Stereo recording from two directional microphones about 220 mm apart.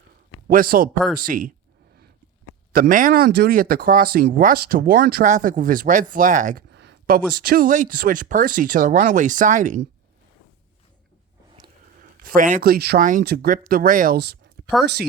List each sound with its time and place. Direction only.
0.4 s a man's voice: 40° right (ahead or behind)
2.7 s speech: 40° right (ahead or behind)
6.7 s speech: 50° right (ahead or behind); by 9.8 s 35° right (ahead or behind)
11.9 s speech: 40° right (ahead or behind)
14.6 s a sound: 40° right (ahead or behind)